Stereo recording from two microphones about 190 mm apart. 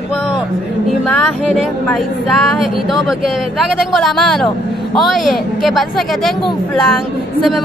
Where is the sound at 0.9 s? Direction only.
5° left (ahead or behind).